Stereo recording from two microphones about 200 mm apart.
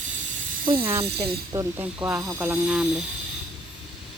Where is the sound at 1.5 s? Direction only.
10° right (ahead or behind).